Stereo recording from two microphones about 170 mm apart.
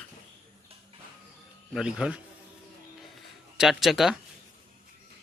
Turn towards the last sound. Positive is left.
turn(degrees=0)  # may be behind; listen again after turning